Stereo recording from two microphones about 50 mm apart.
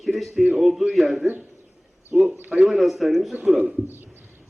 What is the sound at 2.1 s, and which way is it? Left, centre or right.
Speech, right.